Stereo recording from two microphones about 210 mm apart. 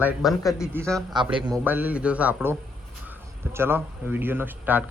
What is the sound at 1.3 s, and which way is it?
Speech, 20° right (ahead or behind).